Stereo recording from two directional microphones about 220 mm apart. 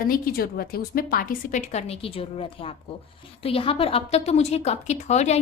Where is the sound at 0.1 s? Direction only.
45° left (ahead or behind).